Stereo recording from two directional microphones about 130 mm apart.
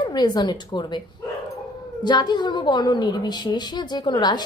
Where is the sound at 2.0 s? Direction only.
35° left (ahead or behind).